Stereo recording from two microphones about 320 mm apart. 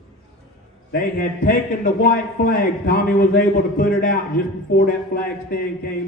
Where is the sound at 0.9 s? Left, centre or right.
Left.